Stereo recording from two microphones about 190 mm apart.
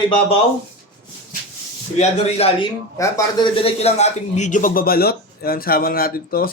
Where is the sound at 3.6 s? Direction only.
30° left (ahead or behind); by 6.5 s 50° left (ahead or behind).